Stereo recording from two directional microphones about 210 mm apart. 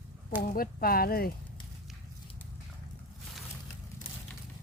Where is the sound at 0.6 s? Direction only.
45° left (ahead or behind).